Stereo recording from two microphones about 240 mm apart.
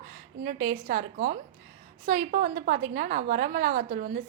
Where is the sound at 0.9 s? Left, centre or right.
Right.